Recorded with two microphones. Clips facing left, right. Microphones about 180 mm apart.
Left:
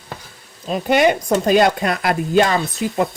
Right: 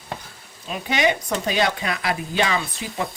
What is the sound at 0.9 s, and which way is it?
Speech, 55° left (ahead or behind).